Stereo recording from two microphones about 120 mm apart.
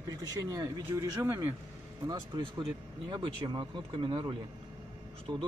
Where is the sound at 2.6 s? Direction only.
40° right (ahead or behind).